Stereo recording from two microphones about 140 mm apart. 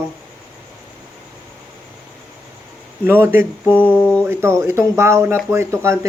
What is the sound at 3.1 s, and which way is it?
Speech, 15° right (ahead or behind).